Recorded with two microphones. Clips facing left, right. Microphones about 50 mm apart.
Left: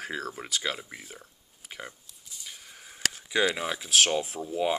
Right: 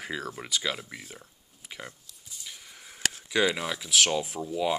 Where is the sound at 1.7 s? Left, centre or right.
Centre.